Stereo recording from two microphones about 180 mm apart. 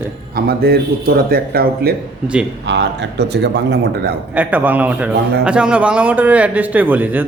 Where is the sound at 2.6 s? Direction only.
75° right (ahead or behind).